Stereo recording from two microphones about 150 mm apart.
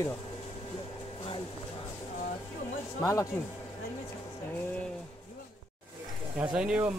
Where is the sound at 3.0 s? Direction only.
20° left (ahead or behind).